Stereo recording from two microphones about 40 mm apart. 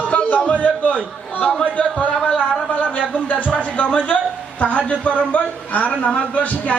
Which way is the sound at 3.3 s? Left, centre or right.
Left.